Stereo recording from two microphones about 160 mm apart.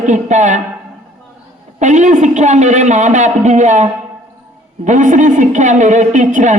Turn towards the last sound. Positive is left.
turn(degrees=-50)  # may be behind; listen again after turning